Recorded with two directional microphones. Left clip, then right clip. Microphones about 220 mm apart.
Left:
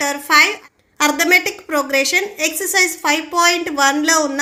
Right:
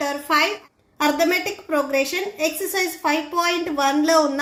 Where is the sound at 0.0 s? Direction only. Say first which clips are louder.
Left 7 dB; 30° left (ahead or behind).